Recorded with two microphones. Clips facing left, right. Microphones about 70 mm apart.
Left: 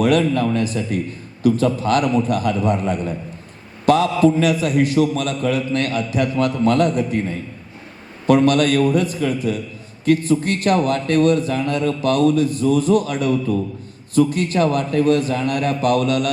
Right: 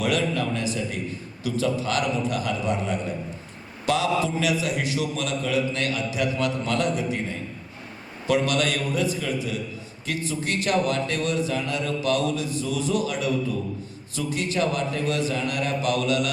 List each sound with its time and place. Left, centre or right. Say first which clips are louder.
0.0 s a man's voice: left 8 dB; left
8.3 s a man's voice: left 8 dB; left